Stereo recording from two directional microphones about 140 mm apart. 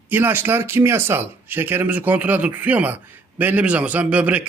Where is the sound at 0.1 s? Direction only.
15° right (ahead or behind).